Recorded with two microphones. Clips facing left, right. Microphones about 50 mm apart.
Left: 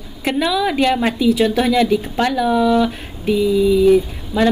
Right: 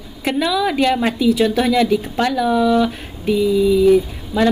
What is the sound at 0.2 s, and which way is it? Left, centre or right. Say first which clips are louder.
A woman's voice: even; centre.